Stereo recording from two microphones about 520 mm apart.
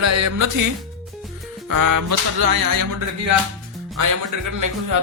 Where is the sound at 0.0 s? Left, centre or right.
Right.